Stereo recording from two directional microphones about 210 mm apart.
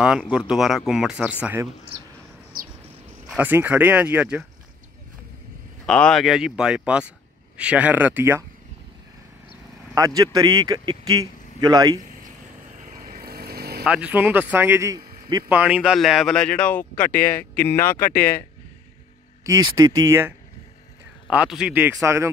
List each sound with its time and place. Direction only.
0.0 s speech: 5° right (ahead or behind)
3.3 s a man's voice: 10° right (ahead or behind)
5.9 s speech: 5° left (ahead or behind)
9.9 s a man's voice: 15° right (ahead or behind)
12.8 s vehicle: 40° right (ahead or behind)
13.8 s a man's voice: 5° right (ahead or behind)
17.1 s speech: 45° left (ahead or behind)
17.6 s speech: 10° left (ahead or behind)
19.4 s a man's voice: 15° right (ahead or behind)